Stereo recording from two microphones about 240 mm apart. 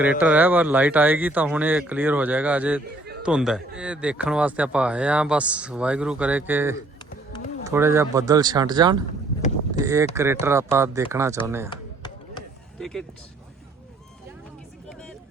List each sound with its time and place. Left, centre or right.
0.0 s speech: centre
11.7 s chop: centre
12.8 s speech: centre